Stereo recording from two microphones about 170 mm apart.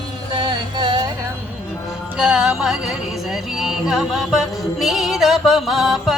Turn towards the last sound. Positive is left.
turn(degrees=0)  # may be behind; listen again after turning